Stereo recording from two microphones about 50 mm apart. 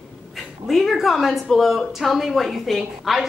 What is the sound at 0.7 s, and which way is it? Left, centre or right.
Speech, centre.